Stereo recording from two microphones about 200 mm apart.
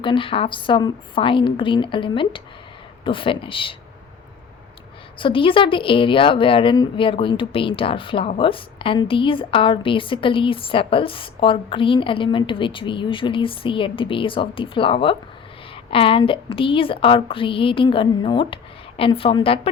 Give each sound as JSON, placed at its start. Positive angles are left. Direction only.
{"t": 0.0, "sound": "a woman's voice", "side_deg": 25}
{"t": 5.2, "sound": "a woman's voice", "side_deg": 25}